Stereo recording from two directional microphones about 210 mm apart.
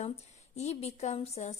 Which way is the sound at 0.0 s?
30° left (ahead or behind).